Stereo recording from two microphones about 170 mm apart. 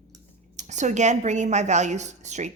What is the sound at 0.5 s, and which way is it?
A woman's voice, 45° right (ahead or behind).